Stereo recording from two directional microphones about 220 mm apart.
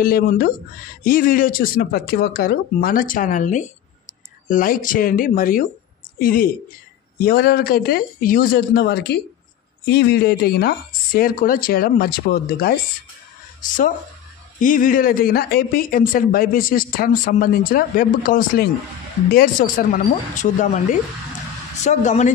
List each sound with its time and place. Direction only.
0.0 s a man's voice: 40° left (ahead or behind)
21.8 s a man's voice: 35° left (ahead or behind)